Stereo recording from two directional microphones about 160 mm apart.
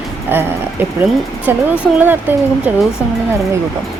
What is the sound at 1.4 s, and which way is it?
Speech, 10° right (ahead or behind).